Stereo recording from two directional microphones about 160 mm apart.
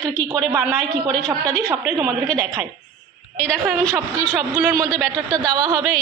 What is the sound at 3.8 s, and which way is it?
A man's voice, 20° right (ahead or behind).